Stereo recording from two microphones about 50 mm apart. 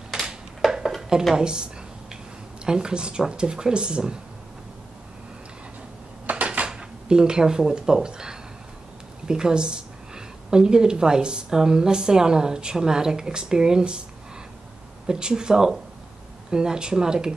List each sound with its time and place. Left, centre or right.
0.7 s dishes: centre
1.3 s a woman's voice: centre
6.3 s dishes: right
6.7 s a woman's voice: centre
15.0 s a woman's voice: centre